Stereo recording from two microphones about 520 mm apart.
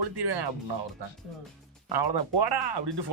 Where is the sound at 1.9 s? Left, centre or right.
Right.